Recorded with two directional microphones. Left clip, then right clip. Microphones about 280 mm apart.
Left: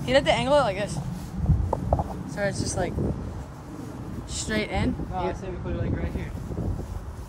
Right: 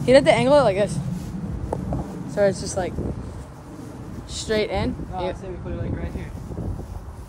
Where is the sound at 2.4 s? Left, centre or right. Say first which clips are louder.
Right 7 dB; centre.